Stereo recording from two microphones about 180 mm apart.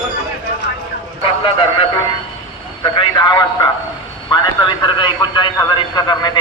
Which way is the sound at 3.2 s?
25° left (ahead or behind).